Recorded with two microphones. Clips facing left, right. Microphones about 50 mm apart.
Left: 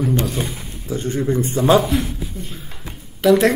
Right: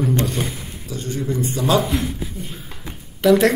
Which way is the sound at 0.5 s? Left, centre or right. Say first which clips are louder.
Left 4 dB; left.